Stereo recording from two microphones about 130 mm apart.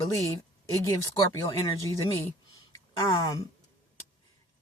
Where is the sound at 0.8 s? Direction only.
25° left (ahead or behind).